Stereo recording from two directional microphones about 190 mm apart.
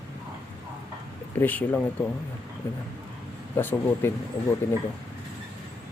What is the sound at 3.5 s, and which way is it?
Speech, 10° left (ahead or behind).